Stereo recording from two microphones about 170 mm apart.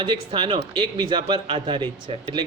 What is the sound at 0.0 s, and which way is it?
A man's voice, 30° right (ahead or behind).